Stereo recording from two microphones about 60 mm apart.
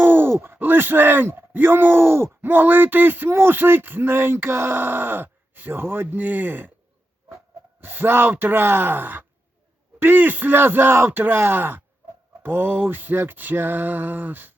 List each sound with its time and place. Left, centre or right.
0.0 s speech: right
7.8 s speech: right